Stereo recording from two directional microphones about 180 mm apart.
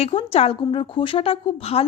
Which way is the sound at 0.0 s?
35° left (ahead or behind).